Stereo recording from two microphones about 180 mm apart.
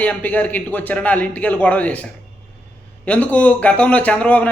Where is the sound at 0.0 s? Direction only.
10° left (ahead or behind).